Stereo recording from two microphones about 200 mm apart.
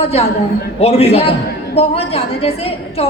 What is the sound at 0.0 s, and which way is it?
A woman's voice, 30° left (ahead or behind).